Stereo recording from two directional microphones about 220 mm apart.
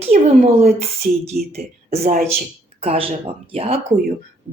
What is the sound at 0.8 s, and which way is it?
Speech, 30° right (ahead or behind).